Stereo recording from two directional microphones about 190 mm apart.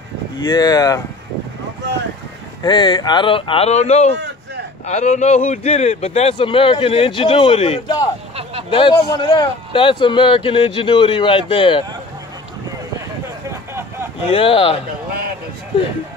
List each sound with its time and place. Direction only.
0.5 s a man's voice: 20° left (ahead or behind)
2.6 s a man's voice: 25° left (ahead or behind)
13.7 s a sound: 15° right (ahead or behind)
14.3 s a man's voice: 30° left (ahead or behind)